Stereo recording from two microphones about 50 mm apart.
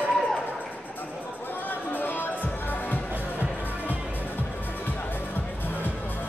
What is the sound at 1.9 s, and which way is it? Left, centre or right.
Music, left.